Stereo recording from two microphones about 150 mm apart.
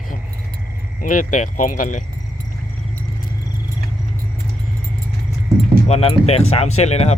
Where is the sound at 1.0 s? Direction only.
60° left (ahead or behind).